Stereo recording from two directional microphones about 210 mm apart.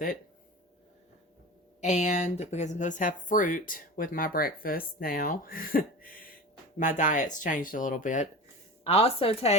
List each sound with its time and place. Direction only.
1.8 s a woman's voice: 35° left (ahead or behind)